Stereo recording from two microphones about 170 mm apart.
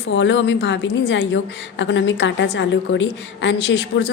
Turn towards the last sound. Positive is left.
turn(degrees=90)